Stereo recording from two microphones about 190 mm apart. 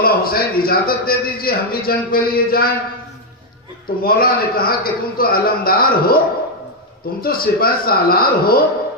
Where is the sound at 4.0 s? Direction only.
50° left (ahead or behind).